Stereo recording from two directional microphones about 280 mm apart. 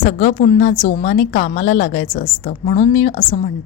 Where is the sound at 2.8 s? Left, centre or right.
Left.